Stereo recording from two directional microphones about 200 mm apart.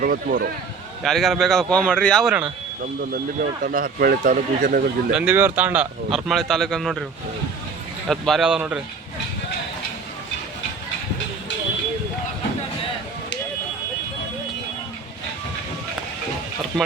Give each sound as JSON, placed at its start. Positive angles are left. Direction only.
{"t": 0.0, "sound": "speech", "side_deg": -45}
{"t": 1.0, "sound": "speech", "side_deg": 0}
{"t": 3.6, "sound": "speech", "side_deg": -45}
{"t": 5.1, "sound": "speech", "side_deg": -5}
{"t": 8.0, "sound": "speech", "side_deg": 0}